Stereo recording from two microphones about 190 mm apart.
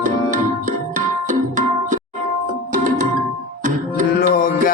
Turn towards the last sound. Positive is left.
turn(degrees=50)  # may be behind; listen again after turning